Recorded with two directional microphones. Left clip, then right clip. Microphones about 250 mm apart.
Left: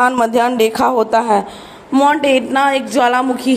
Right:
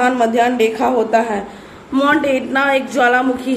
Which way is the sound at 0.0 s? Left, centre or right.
Left.